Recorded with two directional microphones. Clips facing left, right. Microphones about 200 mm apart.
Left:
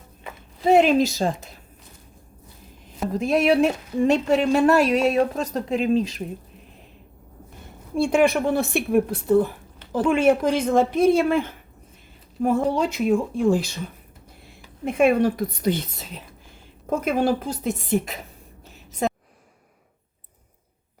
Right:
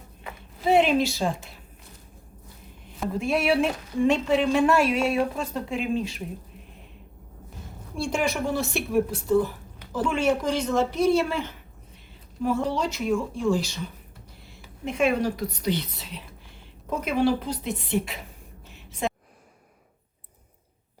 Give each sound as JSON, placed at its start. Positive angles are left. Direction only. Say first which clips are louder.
{"t": 0.7, "sound": "a woman's voice", "louder": "left 4 dB", "side_deg": 40}
{"t": 3.1, "sound": "a woman's voice", "louder": "left 4 dB", "side_deg": 40}
{"t": 7.9, "sound": "a woman's voice", "louder": "left 8 dB", "side_deg": 55}
{"t": 18.7, "sound": "a sound", "louder": "left 4 dB", "side_deg": 40}